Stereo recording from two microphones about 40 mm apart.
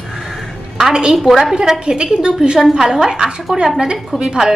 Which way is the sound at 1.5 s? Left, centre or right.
Centre.